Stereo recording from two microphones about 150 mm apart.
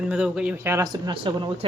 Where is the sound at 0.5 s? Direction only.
15° right (ahead or behind).